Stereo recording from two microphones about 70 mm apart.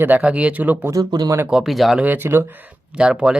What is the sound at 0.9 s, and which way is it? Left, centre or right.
Speech, right.